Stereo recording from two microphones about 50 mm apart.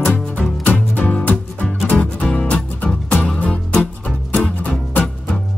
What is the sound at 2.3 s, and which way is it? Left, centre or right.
Music, left.